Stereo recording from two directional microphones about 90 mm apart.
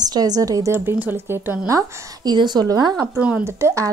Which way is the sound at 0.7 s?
25° right (ahead or behind).